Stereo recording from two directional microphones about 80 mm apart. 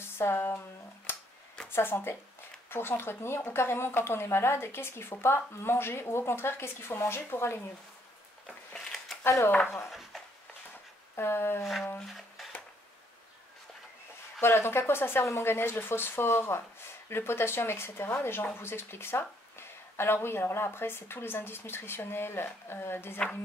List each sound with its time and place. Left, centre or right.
0.2 s speech: left
1.8 s speech: left
8.7 s a sound: centre
9.2 s speech: left
9.8 s a sound: centre
11.1 s speech: left
14.4 s speech: left